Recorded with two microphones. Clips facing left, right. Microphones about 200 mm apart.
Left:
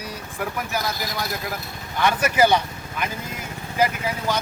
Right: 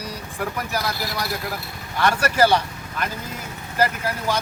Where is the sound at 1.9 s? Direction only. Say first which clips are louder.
Even; 10° left (ahead or behind).